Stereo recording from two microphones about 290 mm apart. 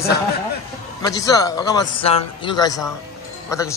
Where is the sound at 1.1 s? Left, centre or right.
Centre.